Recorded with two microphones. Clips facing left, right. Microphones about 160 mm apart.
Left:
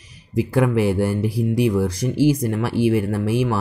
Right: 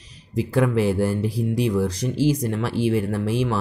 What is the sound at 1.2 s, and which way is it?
Speech, 65° left (ahead or behind).